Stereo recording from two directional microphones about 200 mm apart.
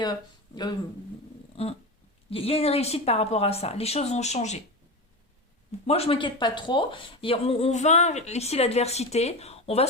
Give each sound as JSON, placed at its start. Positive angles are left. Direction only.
{"t": 0.0, "sound": "speech", "side_deg": 20}
{"t": 2.3, "sound": "speech", "side_deg": 30}
{"t": 5.8, "sound": "speech", "side_deg": 30}